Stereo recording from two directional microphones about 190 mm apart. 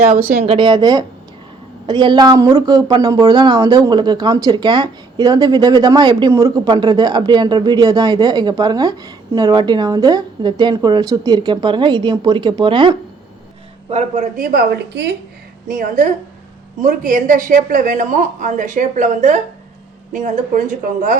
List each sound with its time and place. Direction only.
0.4 s speech: 25° right (ahead or behind)
13.9 s a woman's voice: 40° right (ahead or behind)
15.7 s a woman's voice: 45° right (ahead or behind)